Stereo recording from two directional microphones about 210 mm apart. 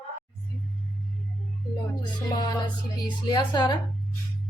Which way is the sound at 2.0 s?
20° left (ahead or behind).